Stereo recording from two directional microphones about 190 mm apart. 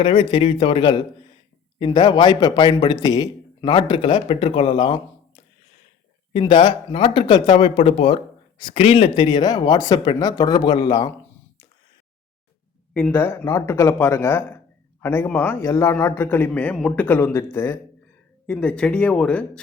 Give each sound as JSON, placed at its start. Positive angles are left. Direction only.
{"t": 0.0, "sound": "speech", "side_deg": 25}
{"t": 6.3, "sound": "speech", "side_deg": 25}
{"t": 12.9, "sound": "a man's voice", "side_deg": 10}